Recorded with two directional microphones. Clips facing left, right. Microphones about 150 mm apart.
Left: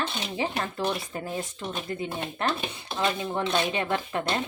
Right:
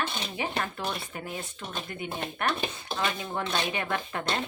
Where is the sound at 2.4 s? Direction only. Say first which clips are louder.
Left 1 dB; 30° left (ahead or behind).